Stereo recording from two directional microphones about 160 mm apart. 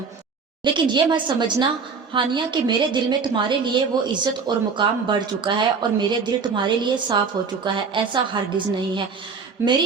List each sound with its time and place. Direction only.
0.6 s a woman's voice: 30° right (ahead or behind)
9.6 s speech: 15° right (ahead or behind)